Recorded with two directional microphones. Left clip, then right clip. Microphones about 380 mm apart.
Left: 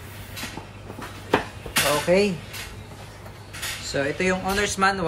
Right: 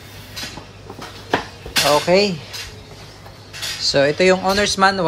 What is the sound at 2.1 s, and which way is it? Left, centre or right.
Speech, right.